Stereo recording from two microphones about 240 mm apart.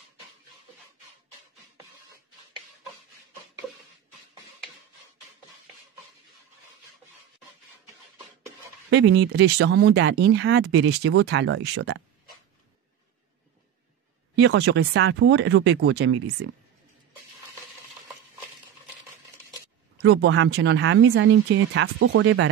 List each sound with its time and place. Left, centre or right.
8.9 s speech: right
14.3 s speech: right
20.0 s speech: right